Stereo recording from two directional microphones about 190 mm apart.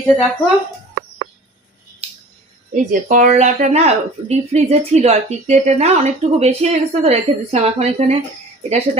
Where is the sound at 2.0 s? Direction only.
30° right (ahead or behind).